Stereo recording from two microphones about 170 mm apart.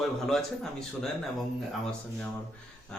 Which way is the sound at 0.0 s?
Centre (ahead or behind).